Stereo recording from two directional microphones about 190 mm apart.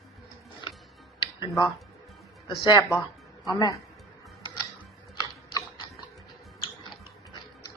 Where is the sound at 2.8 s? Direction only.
5° left (ahead or behind).